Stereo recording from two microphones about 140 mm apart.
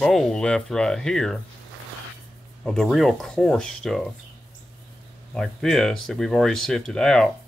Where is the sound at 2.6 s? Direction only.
Centre (ahead or behind).